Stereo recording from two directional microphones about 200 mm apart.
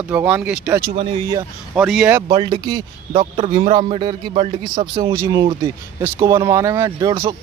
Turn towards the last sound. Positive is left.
turn(degrees=-15)  # may be behind; listen again after turning